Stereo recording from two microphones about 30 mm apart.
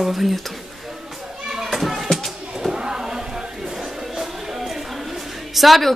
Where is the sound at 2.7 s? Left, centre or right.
Right.